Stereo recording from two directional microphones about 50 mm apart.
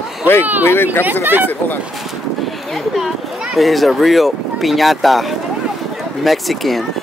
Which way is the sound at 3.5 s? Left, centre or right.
Centre.